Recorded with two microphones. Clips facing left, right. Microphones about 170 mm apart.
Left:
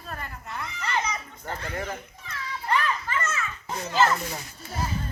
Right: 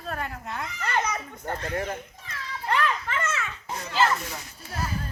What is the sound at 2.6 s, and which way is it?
Children playing, 70° right (ahead or behind).